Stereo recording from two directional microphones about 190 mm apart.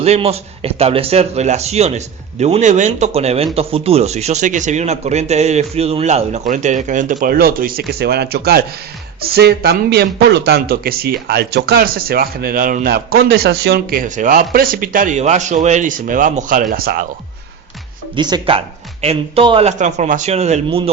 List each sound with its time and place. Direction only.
0.0 s a man's voice: 35° right (ahead or behind); by 17.1 s 50° right (ahead or behind)
18.2 s a man's voice: 20° right (ahead or behind)